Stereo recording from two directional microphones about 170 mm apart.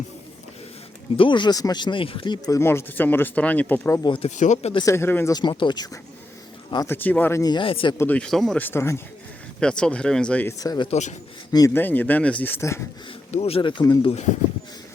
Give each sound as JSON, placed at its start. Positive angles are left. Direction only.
{"t": 1.1, "sound": "speech", "side_deg": 30}
{"t": 4.0, "sound": "speech", "side_deg": 30}
{"t": 4.3, "sound": "speech", "side_deg": 45}
{"t": 4.8, "sound": "speech", "side_deg": 15}
{"t": 6.8, "sound": "speech", "side_deg": 10}
{"t": 7.9, "sound": "speech", "side_deg": 10}
{"t": 8.6, "sound": "speech", "side_deg": 15}
{"t": 10.6, "sound": "speech", "side_deg": 20}
{"t": 13.3, "sound": "speech", "side_deg": 35}